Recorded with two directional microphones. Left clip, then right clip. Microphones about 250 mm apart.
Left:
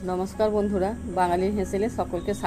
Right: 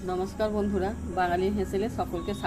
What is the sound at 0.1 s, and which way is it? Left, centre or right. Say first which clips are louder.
Speech: left 4 dB; left.